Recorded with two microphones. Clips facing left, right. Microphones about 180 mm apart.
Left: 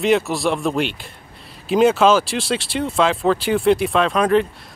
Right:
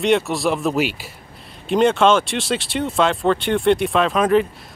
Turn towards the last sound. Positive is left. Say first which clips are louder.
# even
turn(degrees=0)  # may be behind; listen again after turning